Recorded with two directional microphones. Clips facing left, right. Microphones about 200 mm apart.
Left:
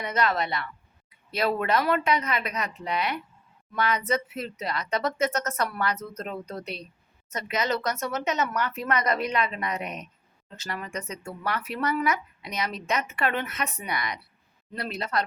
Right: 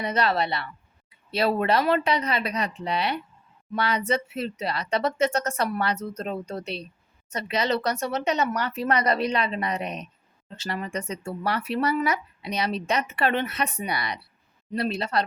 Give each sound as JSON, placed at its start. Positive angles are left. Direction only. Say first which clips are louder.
{"t": 0.0, "sound": "speech", "louder": "right 2 dB", "side_deg": -30}